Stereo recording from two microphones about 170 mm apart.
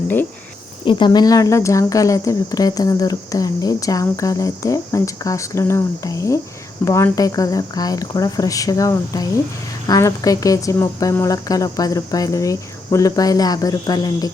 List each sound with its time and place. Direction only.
0.9 s speech: 25° left (ahead or behind)